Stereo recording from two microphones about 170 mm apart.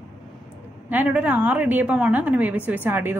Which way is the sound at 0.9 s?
10° right (ahead or behind).